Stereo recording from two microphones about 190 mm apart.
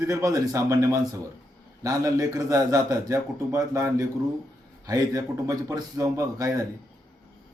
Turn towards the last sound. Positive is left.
turn(degrees=-20)  # may be behind; listen again after turning